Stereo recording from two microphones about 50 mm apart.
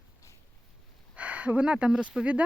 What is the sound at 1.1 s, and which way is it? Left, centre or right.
Speech, right.